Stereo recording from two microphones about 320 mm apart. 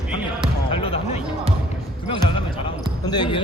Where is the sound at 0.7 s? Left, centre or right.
Centre.